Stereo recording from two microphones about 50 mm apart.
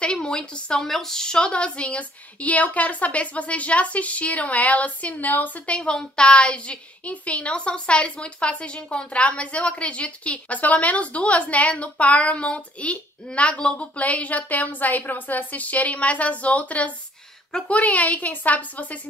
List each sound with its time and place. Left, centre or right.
0.0 s a woman's voice: centre
0.8 s a woman's voice: centre; by 5.6 s left
5.7 s a woman's voice: centre